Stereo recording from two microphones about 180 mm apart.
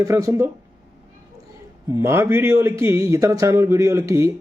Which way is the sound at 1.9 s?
15° right (ahead or behind).